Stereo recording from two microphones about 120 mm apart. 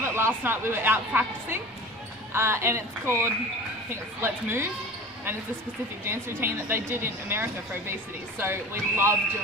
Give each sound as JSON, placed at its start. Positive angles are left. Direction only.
{"t": 0.0, "sound": "a sound", "side_deg": -20}
{"t": 0.4, "sound": "a woman's voice", "side_deg": -20}
{"t": 6.1, "sound": "a woman's voice", "side_deg": -20}